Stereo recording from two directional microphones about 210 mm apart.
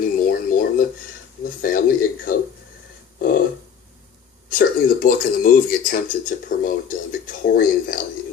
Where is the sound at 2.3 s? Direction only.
40° left (ahead or behind).